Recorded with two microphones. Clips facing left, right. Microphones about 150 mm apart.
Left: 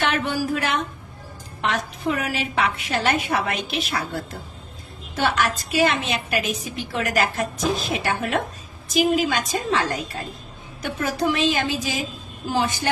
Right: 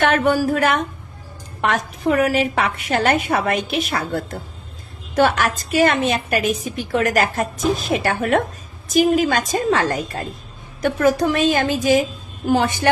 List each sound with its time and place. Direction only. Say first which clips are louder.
0.0 s a woman's voice: right 7 dB; 50° right (ahead or behind)